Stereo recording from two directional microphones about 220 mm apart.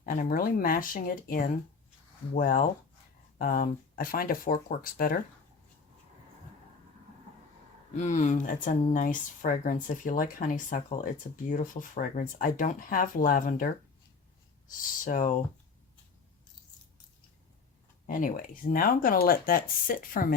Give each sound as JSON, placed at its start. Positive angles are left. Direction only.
{"t": 0.0, "sound": "speech", "side_deg": 40}
{"t": 7.9, "sound": "speech", "side_deg": 35}
{"t": 15.0, "sound": "speech", "side_deg": 35}
{"t": 18.0, "sound": "speech", "side_deg": 40}